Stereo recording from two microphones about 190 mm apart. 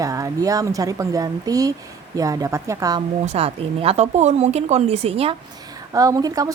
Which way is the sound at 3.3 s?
30° right (ahead or behind).